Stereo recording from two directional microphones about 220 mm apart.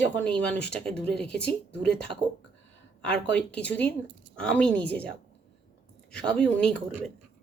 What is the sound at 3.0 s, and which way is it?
Speech, 5° left (ahead or behind).